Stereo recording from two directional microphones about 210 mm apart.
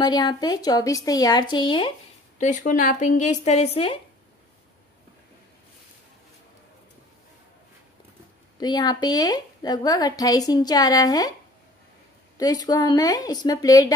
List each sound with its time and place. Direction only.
0.0 s a woman's voice: 20° left (ahead or behind)
2.3 s speech: 35° left (ahead or behind)
8.5 s a woman's voice: 20° left (ahead or behind)
12.4 s a woman's voice: 15° left (ahead or behind)